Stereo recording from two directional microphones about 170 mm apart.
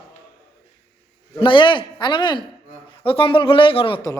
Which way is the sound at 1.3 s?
30° left (ahead or behind).